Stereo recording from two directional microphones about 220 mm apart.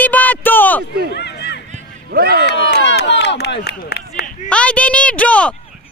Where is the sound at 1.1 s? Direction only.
50° left (ahead or behind).